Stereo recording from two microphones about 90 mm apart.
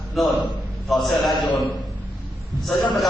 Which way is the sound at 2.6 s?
Centre (ahead or behind).